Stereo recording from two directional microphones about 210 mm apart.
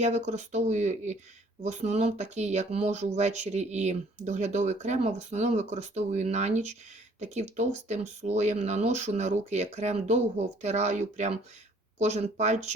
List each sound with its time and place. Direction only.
0.0 s speech: 35° right (ahead or behind)